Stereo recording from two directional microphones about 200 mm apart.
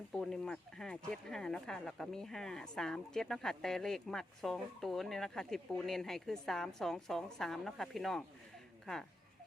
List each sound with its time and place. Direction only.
0.1 s speech: 5° left (ahead or behind)